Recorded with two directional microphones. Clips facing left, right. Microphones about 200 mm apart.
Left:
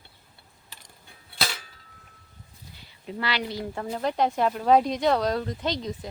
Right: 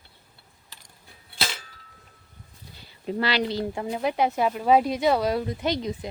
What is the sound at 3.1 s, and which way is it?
Speech, 30° right (ahead or behind).